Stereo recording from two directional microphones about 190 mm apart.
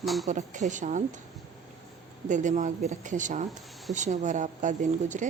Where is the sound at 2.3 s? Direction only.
40° right (ahead or behind).